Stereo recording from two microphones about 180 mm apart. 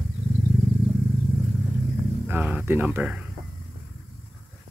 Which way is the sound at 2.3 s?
10° right (ahead or behind).